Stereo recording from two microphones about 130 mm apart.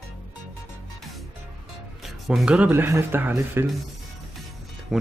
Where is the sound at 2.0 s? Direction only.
Centre (ahead or behind); by 3.6 s 15° right (ahead or behind).